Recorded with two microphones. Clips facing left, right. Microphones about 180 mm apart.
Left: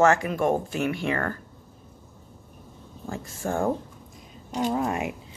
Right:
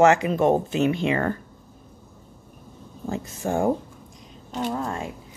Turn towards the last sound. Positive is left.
turn(degrees=15)  # may be behind; listen again after turning